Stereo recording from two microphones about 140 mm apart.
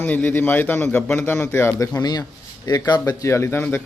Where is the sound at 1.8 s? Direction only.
30° left (ahead or behind).